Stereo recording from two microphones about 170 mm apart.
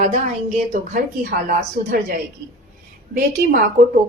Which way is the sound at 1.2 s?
60° right (ahead or behind).